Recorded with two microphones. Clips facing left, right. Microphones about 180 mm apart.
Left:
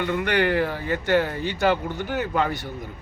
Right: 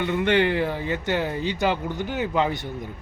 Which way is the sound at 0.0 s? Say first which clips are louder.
Right 1 dB; 20° right (ahead or behind).